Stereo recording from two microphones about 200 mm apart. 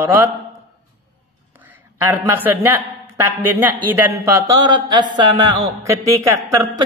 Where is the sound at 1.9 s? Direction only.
10° right (ahead or behind).